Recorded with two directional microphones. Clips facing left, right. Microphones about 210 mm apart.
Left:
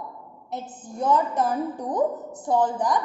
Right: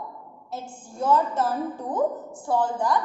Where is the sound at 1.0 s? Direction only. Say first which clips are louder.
Even; 15° left (ahead or behind).